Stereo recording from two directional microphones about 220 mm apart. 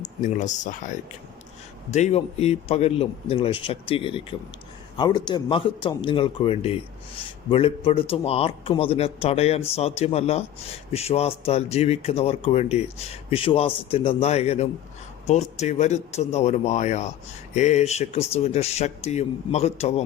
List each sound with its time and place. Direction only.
0.0 s speech: 35° left (ahead or behind)